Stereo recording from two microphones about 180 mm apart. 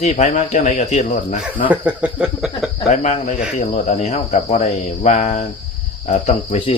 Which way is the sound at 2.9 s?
40° left (ahead or behind).